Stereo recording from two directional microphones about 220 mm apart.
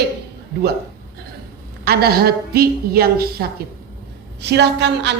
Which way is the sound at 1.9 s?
45° right (ahead or behind).